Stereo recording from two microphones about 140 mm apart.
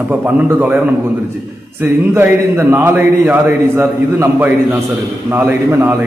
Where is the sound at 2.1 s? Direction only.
15° right (ahead or behind).